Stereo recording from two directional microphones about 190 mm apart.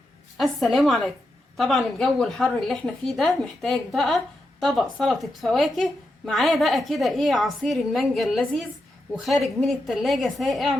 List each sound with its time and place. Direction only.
0.3 s a woman's voice: centre (ahead or behind)